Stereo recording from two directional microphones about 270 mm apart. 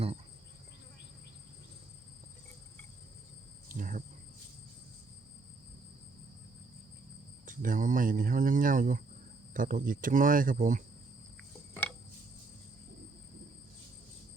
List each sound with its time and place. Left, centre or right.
3.7 s cricket: right
7.4 s cricket: right
9.5 s speech: right